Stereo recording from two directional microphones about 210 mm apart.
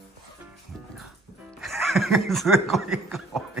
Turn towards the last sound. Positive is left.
turn(degrees=0)  # may be behind; listen again after turning